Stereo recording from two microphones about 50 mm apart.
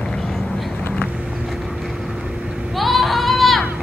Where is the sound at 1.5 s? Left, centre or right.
Centre.